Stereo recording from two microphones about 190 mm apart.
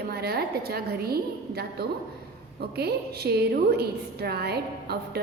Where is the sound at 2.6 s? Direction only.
55° right (ahead or behind).